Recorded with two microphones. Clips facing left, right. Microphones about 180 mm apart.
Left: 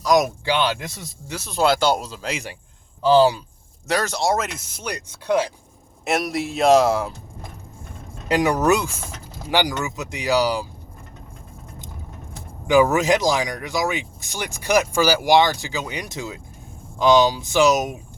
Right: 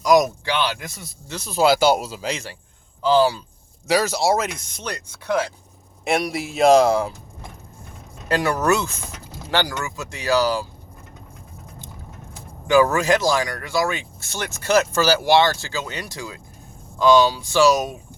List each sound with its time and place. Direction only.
0.2 s speech: 15° left (ahead or behind)
1.3 s speech: centre (ahead or behind)
2.3 s speech: 15° left (ahead or behind)
3.8 s speech: 5° right (ahead or behind); by 5.5 s 15° left (ahead or behind)
6.1 s speech: centre (ahead or behind)
8.3 s speech: 15° left (ahead or behind)
12.6 s speech: 15° left (ahead or behind)